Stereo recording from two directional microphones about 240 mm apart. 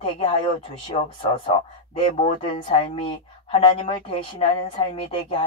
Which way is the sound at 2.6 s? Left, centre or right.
Left.